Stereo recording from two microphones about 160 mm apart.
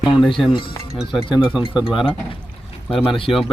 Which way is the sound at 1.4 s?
5° right (ahead or behind).